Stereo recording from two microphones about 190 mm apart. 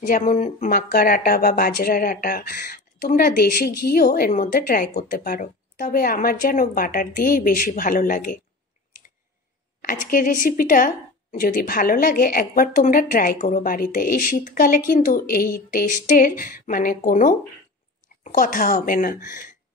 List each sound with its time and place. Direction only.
0.0 s speech: 45° left (ahead or behind)
9.8 s a woman's voice: 50° left (ahead or behind)
19.1 s speech: 15° right (ahead or behind)